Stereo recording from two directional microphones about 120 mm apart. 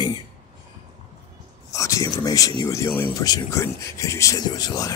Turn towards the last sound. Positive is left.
turn(degrees=30)  # may be behind; listen again after turning